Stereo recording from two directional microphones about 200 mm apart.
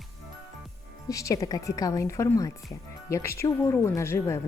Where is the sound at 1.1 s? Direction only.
15° left (ahead or behind).